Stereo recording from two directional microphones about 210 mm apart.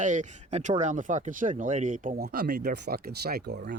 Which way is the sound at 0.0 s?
35° right (ahead or behind).